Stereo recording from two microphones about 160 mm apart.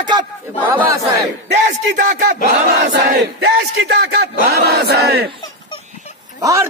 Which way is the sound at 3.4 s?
90° right.